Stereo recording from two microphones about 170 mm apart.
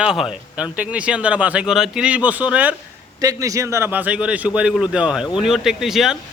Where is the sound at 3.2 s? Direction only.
20° right (ahead or behind).